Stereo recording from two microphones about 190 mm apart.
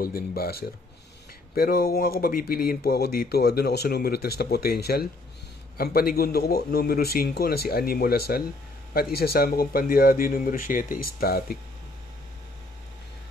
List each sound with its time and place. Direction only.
0.0 s speech: 50° left (ahead or behind)